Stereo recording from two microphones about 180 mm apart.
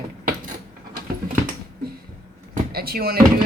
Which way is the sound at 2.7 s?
60° right (ahead or behind).